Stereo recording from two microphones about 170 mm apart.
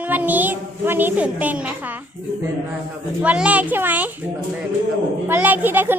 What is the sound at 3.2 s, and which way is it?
Speech, 10° right (ahead or behind).